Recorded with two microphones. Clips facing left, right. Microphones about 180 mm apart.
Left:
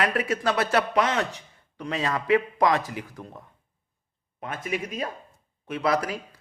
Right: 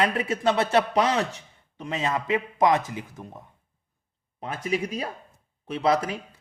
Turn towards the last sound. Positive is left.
turn(degrees=-25)  # may be behind; listen again after turning